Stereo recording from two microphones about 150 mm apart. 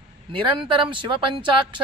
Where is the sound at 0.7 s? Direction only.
35° right (ahead or behind).